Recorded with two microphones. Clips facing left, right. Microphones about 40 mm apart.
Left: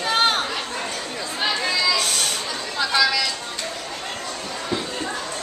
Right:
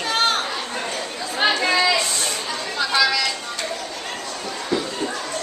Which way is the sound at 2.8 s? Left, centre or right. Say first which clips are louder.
Even; centre.